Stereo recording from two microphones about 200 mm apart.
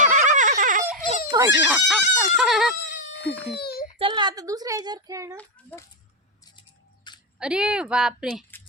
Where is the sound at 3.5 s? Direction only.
55° left (ahead or behind).